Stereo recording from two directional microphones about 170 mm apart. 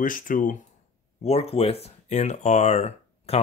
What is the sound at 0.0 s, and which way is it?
Speech, 50° left (ahead or behind).